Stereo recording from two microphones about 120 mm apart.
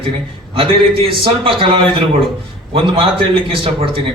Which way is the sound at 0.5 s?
50° right (ahead or behind).